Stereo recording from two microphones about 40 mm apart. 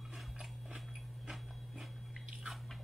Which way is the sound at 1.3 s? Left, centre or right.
Centre.